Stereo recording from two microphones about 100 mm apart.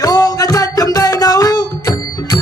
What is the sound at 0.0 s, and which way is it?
Music, 40° left (ahead or behind).